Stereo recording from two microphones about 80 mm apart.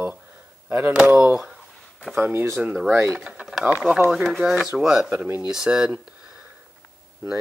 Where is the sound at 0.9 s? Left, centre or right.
Centre.